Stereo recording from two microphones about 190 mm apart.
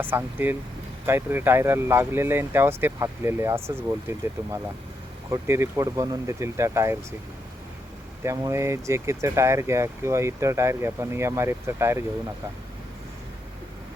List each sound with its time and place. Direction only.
0.0 s speech: 10° right (ahead or behind)
5.3 s speech: 15° right (ahead or behind)
8.2 s speech: 15° right (ahead or behind)